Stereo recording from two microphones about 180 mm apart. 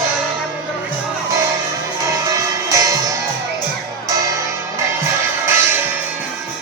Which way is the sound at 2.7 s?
20° right (ahead or behind).